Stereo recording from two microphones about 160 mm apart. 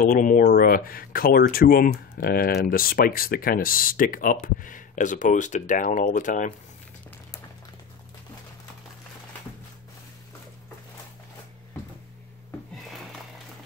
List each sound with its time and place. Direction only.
0.0 s speech: 55° left (ahead or behind)